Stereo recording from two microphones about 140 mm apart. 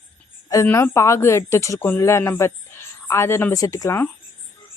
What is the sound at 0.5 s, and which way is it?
Speech, 25° left (ahead or behind).